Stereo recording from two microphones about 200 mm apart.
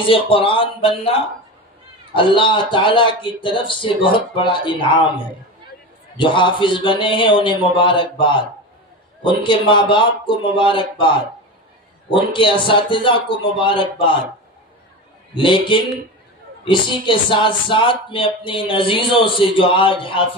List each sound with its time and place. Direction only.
0.0 s speech: 25° left (ahead or behind)
12.1 s speech: 25° left (ahead or behind)
15.3 s speech: 25° left (ahead or behind)